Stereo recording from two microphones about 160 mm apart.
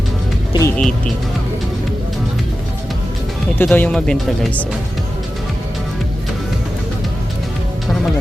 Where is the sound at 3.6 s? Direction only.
5° left (ahead or behind).